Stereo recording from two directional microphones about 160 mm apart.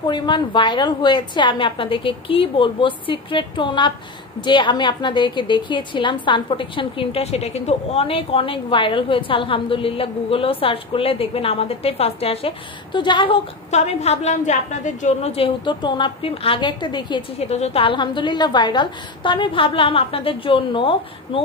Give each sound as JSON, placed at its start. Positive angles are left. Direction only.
{"t": 0.0, "sound": "a woman's voice", "side_deg": 30}
{"t": 13.7, "sound": "a woman's voice", "side_deg": 45}
{"t": 17.5, "sound": "a woman's voice", "side_deg": 40}